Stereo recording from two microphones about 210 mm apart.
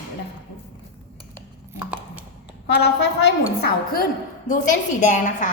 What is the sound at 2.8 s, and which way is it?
Speech, 55° left (ahead or behind).